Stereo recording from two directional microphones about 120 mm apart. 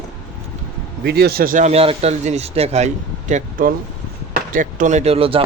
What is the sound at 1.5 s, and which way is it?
Speech, 75° right (ahead or behind).